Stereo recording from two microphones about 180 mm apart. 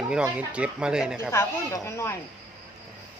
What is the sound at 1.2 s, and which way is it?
Speech, 15° left (ahead or behind).